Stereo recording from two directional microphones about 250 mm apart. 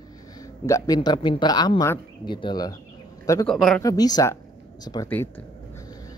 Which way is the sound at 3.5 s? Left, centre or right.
Centre.